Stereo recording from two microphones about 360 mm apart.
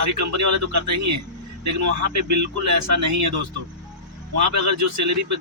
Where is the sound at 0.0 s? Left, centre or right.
Right.